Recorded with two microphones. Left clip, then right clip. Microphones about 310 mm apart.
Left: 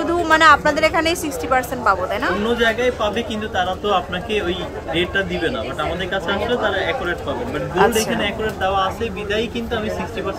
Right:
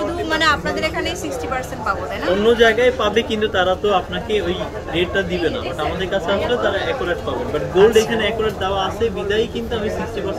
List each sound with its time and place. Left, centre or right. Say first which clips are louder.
0.3 s a woman's voice: left 6 dB; centre
2.5 s speech: right 5 dB; centre
7.7 s speech: right 4 dB; centre
8.2 s speech: right 2 dB; centre